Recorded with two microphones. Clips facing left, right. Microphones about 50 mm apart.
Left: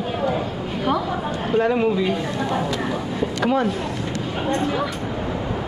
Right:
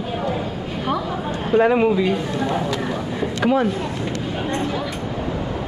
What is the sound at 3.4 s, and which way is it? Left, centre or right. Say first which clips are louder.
Speech: right 2 dB; centre.